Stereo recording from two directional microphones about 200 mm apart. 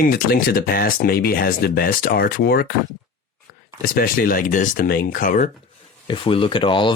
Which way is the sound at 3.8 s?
50° left (ahead or behind).